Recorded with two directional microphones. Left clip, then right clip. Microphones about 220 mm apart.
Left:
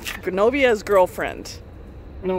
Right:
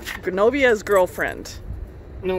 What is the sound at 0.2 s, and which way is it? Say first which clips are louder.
Speech: even; centre (ahead or behind).